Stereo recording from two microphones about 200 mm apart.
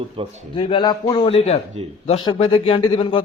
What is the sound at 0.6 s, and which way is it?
A man's voice, 25° left (ahead or behind).